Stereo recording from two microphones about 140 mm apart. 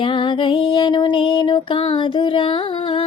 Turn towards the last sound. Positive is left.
turn(degrees=40)  # may be behind; listen again after turning